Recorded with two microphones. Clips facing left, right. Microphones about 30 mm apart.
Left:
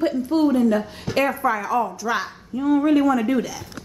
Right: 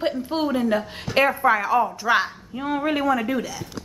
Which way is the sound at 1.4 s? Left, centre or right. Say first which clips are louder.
Right 2 dB; right.